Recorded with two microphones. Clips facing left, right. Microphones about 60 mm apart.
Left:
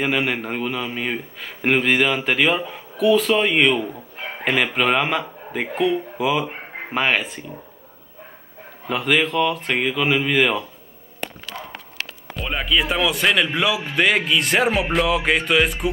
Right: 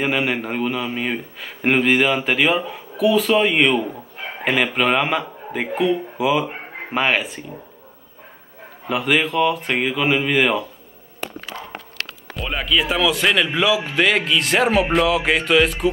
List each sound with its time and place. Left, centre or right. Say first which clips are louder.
0.0 s a man's voice: right 1 dB; centre
8.8 s a man's voice: right 1 dB; centre
12.4 s a man's voice: right 1 dB; centre